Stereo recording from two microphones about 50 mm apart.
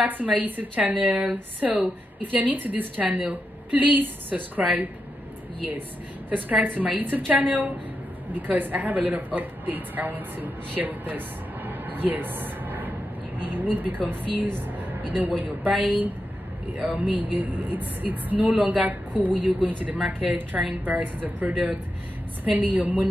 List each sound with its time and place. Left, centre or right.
0.0 s a woman's voice: right
17.2 s a woman's voice: right